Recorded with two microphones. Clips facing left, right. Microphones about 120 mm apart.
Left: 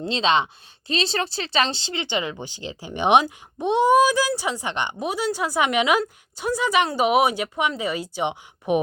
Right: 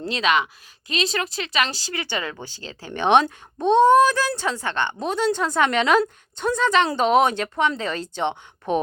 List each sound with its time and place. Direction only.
0.0 s speech: 25° left (ahead or behind)